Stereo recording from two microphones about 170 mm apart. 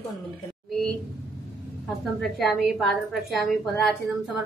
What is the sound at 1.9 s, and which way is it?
A woman's voice, centre (ahead or behind).